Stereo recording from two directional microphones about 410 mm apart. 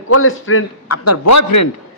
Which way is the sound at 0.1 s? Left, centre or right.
Left.